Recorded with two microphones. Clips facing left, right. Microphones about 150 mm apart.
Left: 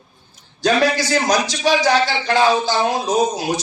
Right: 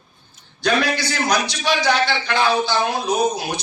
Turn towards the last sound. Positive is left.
turn(degrees=45)  # may be behind; listen again after turning